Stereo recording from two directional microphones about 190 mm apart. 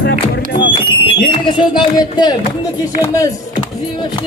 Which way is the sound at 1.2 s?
25° left (ahead or behind).